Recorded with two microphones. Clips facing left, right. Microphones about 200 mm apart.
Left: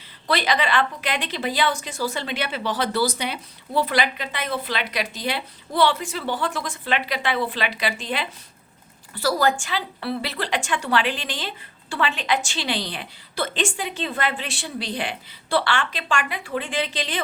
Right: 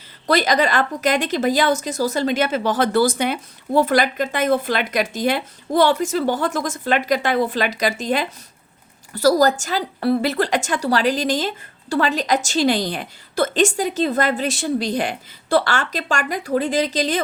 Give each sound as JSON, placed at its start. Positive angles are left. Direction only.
{"t": 0.3, "sound": "a woman's voice", "side_deg": -45}